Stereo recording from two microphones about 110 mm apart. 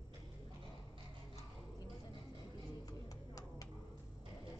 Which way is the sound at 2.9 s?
35° left (ahead or behind).